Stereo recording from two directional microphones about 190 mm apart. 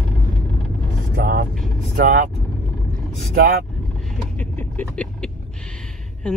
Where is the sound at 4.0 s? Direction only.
Centre (ahead or behind).